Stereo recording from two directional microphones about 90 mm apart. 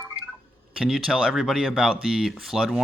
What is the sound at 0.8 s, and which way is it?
Speech, 5° right (ahead or behind).